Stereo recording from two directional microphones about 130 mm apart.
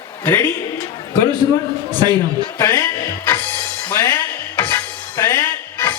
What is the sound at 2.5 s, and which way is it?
Speech, 20° left (ahead or behind).